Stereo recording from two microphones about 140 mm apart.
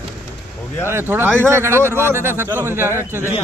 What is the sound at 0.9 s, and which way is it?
Speech, 15° right (ahead or behind).